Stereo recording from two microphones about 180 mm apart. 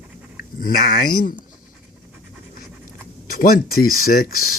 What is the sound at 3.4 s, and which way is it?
Speech, 55° left (ahead or behind).